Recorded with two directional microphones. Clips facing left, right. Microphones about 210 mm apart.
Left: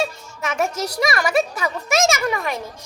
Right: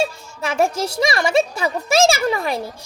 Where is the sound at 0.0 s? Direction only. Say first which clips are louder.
Right 2 dB; 30° right (ahead or behind).